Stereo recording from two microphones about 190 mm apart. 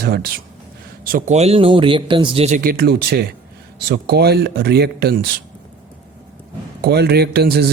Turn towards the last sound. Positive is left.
turn(degrees=-60)  # may be behind; listen again after turning